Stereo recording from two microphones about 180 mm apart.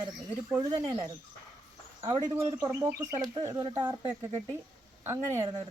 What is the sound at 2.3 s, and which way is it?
Speech, 35° right (ahead or behind).